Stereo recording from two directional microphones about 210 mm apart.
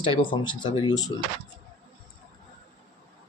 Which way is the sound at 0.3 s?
20° left (ahead or behind).